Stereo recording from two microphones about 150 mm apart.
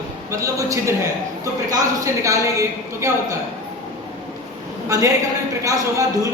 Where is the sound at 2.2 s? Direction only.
20° right (ahead or behind).